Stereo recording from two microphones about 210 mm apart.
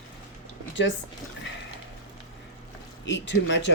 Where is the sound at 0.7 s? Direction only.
60° left (ahead or behind).